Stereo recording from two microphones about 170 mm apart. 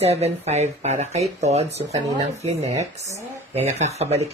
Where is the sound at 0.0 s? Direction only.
40° right (ahead or behind).